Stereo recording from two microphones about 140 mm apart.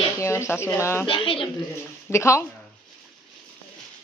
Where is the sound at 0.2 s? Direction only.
20° left (ahead or behind).